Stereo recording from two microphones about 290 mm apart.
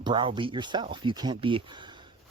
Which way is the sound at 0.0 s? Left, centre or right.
Centre.